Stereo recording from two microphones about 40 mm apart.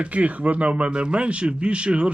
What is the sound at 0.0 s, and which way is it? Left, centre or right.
Speech, right.